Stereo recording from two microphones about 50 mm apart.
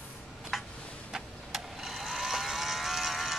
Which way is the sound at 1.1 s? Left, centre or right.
Centre.